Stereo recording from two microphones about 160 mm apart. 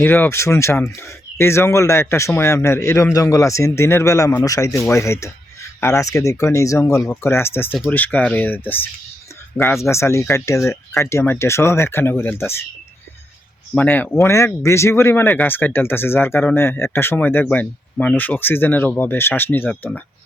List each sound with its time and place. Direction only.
0.0 s speech: 10° left (ahead or behind)
13.7 s speech: 10° left (ahead or behind)